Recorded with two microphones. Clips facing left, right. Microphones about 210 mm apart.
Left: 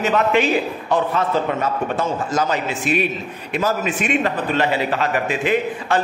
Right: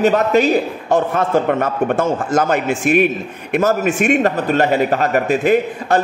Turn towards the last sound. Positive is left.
turn(degrees=-45)  # may be behind; listen again after turning